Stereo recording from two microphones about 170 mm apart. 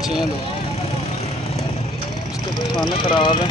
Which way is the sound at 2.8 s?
30° left (ahead or behind).